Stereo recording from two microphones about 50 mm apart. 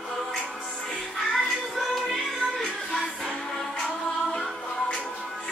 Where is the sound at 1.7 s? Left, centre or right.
Centre.